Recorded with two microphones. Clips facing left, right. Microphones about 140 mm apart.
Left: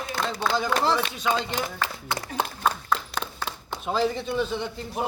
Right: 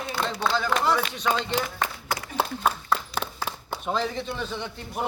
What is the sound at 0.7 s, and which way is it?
Speech, 30° left (ahead or behind).